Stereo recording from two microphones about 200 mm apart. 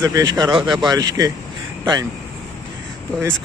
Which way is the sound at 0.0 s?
20° right (ahead or behind).